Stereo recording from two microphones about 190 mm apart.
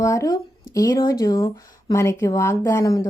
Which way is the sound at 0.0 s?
15° left (ahead or behind).